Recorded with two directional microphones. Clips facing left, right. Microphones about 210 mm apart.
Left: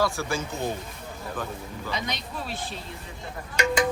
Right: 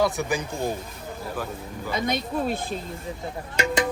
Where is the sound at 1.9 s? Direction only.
50° right (ahead or behind).